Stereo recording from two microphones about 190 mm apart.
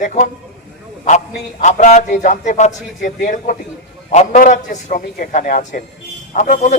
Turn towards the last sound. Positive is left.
turn(degrees=40)  # may be behind; listen again after turning